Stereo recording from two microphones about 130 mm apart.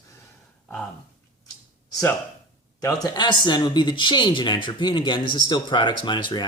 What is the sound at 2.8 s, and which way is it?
Speech, 30° left (ahead or behind).